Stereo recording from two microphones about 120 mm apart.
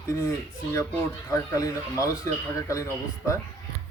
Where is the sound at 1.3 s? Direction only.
30° left (ahead or behind).